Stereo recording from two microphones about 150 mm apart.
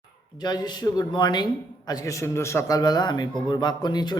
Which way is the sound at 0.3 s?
30° left (ahead or behind).